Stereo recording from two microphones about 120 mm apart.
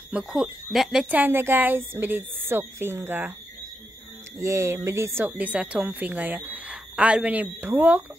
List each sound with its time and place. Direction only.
0.1 s speech: 5° right (ahead or behind)
1.1 s speech: 15° right (ahead or behind)
4.4 s speech: 25° right (ahead or behind)